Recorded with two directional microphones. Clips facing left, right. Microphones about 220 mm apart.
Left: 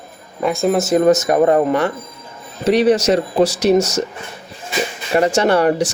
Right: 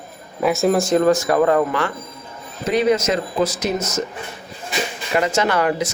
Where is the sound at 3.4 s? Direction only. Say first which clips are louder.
Left 8 dB; 75° left (ahead or behind).